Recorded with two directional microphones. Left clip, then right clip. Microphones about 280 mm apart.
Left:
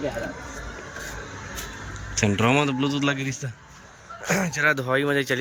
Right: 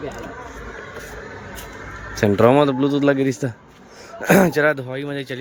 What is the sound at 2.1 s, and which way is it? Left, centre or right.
Speech, centre.